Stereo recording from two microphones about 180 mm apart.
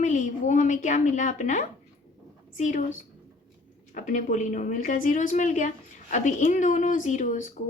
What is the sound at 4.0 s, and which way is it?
A woman's voice, 40° left (ahead or behind).